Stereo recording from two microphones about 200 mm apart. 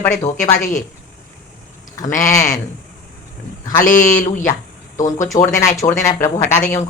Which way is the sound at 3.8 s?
40° left (ahead or behind).